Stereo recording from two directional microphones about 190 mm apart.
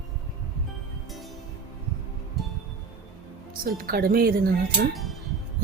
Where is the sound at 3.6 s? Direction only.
50° right (ahead or behind).